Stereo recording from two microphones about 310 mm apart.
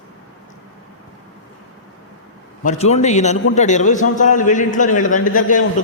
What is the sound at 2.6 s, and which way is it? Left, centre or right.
A man's voice, left.